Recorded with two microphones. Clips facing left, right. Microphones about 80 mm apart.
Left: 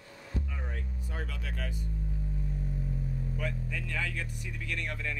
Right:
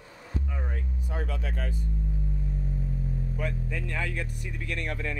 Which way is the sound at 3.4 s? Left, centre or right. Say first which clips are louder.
Right 5 dB; right.